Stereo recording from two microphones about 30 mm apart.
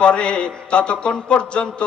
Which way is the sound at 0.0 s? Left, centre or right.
Left.